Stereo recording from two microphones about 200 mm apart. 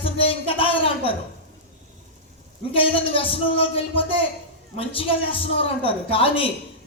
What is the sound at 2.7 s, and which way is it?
A woman's voice, 25° left (ahead or behind).